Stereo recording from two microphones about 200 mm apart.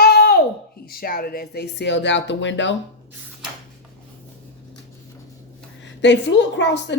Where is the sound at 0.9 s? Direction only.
45° left (ahead or behind); by 2.7 s 65° left (ahead or behind).